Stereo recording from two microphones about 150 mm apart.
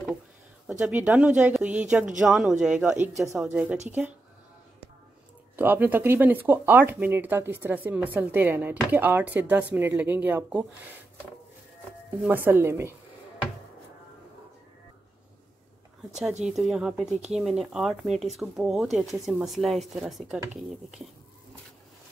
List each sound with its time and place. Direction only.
0.7 s speech: 5° right (ahead or behind)
5.6 s speech: 15° right (ahead or behind)
12.3 s speech: 15° right (ahead or behind)
16.4 s speech: 5° right (ahead or behind)